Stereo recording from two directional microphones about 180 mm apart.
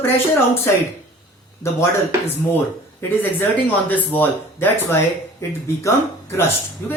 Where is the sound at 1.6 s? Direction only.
15° left (ahead or behind).